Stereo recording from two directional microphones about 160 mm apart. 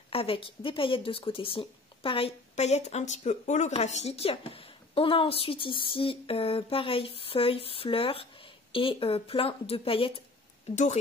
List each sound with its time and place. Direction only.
0.1 s speech: 35° left (ahead or behind)